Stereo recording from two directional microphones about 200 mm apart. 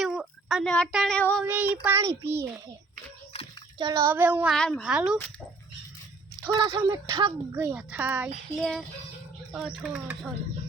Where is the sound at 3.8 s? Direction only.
15° right (ahead or behind).